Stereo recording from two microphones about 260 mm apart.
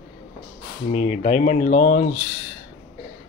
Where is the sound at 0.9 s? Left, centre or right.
Left.